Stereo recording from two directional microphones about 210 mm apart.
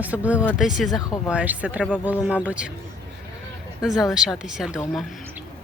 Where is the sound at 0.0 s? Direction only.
5° right (ahead or behind).